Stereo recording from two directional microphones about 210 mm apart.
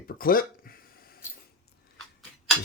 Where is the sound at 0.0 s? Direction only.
45° left (ahead or behind).